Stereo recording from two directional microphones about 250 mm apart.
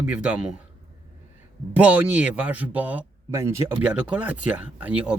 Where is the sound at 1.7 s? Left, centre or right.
Centre.